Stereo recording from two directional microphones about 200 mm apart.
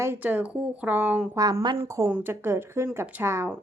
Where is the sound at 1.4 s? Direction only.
20° right (ahead or behind).